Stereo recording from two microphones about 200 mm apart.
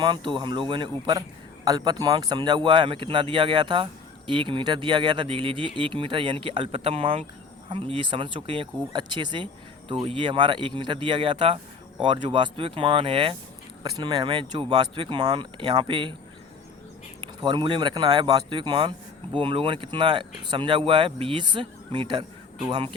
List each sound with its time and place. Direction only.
0.0 s speech: 25° right (ahead or behind)
17.2 s speech: 25° right (ahead or behind)